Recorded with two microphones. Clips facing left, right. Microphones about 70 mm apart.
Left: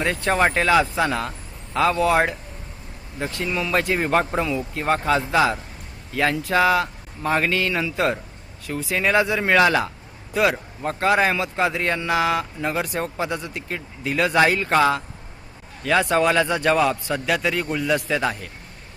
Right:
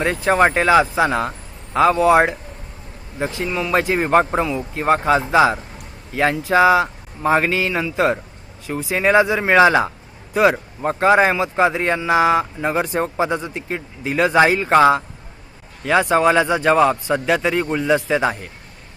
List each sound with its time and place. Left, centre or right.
0.0 s speech: centre
3.4 s speech: centre
7.7 s a man's voice: centre
7.9 s speech: centre